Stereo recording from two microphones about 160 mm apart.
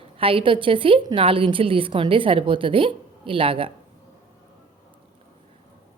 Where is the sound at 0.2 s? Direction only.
35° right (ahead or behind).